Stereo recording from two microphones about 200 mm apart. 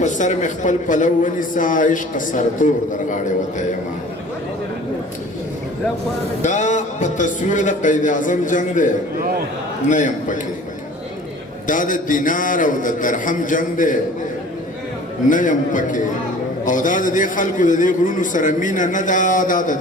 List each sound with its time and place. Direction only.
0.0 s a man's voice: 35° left (ahead or behind)
6.4 s a man's voice: 35° left (ahead or behind)
11.6 s a man's voice: 40° left (ahead or behind)
15.3 s a man's voice: 40° left (ahead or behind)